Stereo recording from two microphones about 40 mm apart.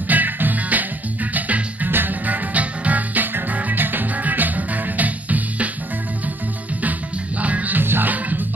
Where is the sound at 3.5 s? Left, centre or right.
Right.